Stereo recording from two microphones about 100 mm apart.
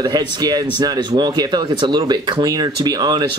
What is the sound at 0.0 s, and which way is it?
Speech, 40° right (ahead or behind).